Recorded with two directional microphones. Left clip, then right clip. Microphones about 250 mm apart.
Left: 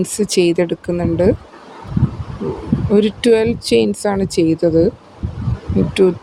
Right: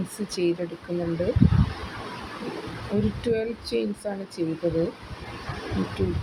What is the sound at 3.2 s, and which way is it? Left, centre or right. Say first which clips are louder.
Speech: left 13 dB; left.